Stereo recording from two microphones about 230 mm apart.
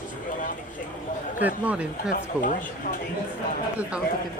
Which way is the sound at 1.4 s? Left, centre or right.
Centre.